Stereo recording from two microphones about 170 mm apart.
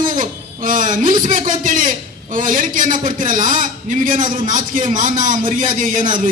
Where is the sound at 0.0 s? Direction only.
50° right (ahead or behind).